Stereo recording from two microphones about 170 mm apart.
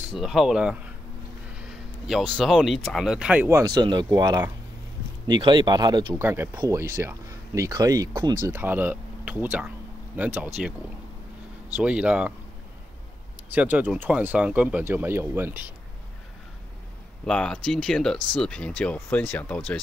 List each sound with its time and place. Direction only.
0.1 s speech: centre (ahead or behind)
3.4 s speech: 20° right (ahead or behind)
6.2 s speech: 10° right (ahead or behind)
8.5 s speech: 10° right (ahead or behind)
11.7 s speech: 5° right (ahead or behind)
13.5 s speech: 10° right (ahead or behind)
17.3 s speech: 5° left (ahead or behind)